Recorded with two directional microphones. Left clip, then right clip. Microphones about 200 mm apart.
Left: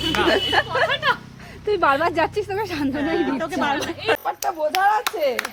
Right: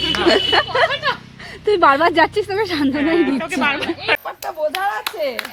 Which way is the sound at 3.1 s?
15° right (ahead or behind).